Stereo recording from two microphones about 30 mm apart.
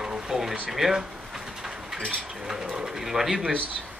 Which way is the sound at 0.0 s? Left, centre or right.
Right.